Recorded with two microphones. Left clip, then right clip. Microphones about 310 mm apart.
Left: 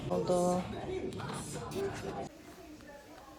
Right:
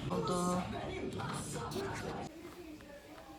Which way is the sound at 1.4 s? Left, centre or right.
Centre.